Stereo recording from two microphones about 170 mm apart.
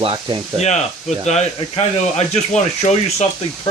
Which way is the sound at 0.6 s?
40° left (ahead or behind).